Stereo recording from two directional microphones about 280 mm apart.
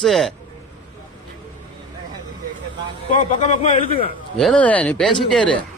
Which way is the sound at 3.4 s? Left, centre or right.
Left.